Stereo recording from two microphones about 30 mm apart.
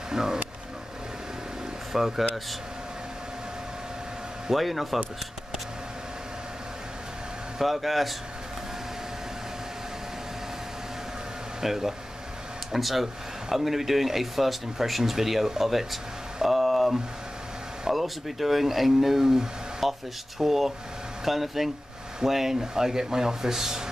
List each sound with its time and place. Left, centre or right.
0.1 s speech: centre
1.9 s speech: centre
4.6 s speech: centre
7.6 s speech: centre
11.6 s speech: centre
16.4 s a sound: centre
17.9 s speech: centre